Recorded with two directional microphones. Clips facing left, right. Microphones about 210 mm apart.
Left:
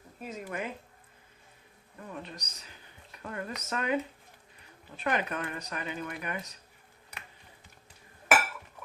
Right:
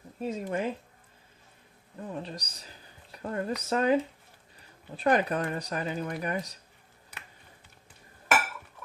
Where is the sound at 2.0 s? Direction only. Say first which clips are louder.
Right 5 dB; 30° right (ahead or behind).